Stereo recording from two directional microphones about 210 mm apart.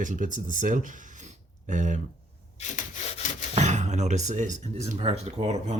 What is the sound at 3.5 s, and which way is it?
Speech, 35° right (ahead or behind).